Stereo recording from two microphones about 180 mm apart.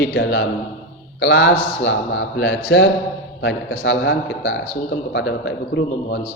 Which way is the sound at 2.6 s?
90° left.